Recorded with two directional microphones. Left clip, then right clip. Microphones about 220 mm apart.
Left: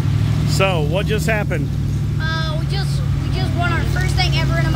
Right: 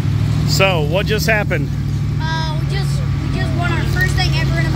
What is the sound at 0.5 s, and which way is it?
Speech, centre (ahead or behind).